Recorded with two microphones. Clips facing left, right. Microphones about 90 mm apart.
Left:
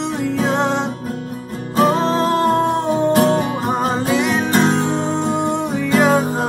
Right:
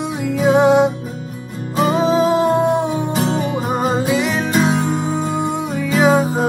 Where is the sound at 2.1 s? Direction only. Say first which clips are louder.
Right 2 dB; 5° right (ahead or behind).